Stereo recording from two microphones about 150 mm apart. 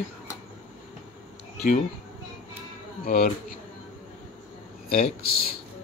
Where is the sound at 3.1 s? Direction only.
70° left (ahead or behind).